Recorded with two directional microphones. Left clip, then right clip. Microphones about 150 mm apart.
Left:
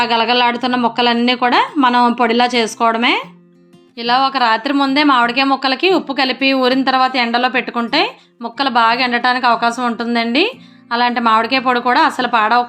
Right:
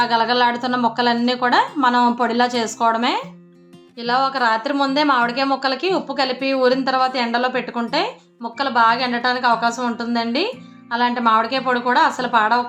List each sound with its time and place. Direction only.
0.0 s speech: 20° left (ahead or behind)